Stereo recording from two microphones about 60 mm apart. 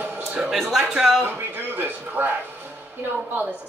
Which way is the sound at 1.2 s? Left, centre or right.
Right.